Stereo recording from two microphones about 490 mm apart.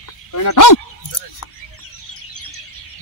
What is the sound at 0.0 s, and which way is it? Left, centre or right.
Dog, left.